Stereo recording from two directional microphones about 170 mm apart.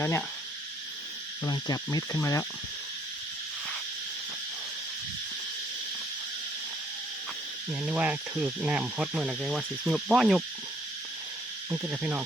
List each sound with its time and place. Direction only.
0.0 s speech: 15° left (ahead or behind)
1.5 s insect: 20° left (ahead or behind)
7.7 s speech: 5° right (ahead or behind)
11.7 s insect: 10° right (ahead or behind)